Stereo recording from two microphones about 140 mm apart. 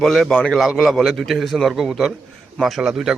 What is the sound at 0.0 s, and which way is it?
Speech, centre (ahead or behind).